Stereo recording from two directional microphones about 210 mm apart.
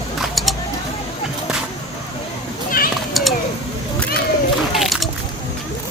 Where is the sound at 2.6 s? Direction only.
45° left (ahead or behind).